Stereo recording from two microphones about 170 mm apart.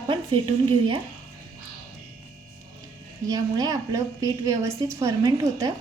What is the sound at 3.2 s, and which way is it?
A woman's voice, 25° right (ahead or behind).